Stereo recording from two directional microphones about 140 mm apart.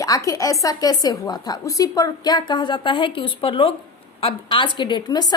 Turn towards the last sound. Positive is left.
turn(degrees=30)  # may be behind; listen again after turning